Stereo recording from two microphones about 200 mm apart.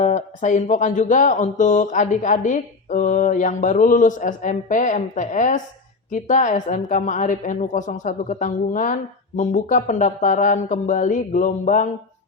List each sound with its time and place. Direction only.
0.0 s a woman's voice: 35° left (ahead or behind)